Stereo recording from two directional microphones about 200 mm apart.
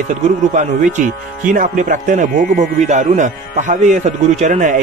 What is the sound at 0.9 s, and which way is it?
Speech, 40° right (ahead or behind).